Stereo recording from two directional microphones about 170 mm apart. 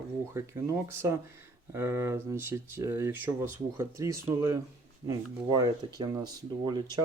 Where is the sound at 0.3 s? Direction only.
15° right (ahead or behind).